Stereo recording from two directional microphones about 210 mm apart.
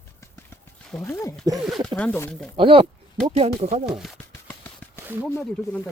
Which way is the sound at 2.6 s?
25° right (ahead or behind).